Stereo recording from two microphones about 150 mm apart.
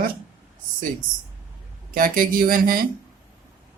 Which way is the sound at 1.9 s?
70° right (ahead or behind).